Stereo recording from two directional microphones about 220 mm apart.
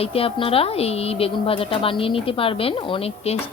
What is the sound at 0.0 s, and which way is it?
A woman's voice, 25° left (ahead or behind).